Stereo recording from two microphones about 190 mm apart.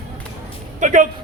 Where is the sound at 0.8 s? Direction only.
40° right (ahead or behind).